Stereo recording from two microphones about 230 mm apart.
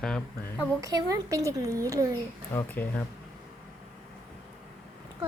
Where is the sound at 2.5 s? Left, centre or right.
Centre.